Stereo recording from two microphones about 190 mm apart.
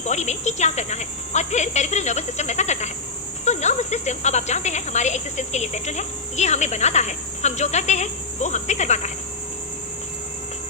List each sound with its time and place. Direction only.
0.0 s speech: 35° left (ahead or behind)